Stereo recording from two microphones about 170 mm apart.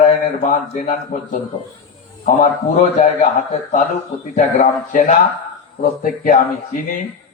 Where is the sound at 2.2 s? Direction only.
45° left (ahead or behind).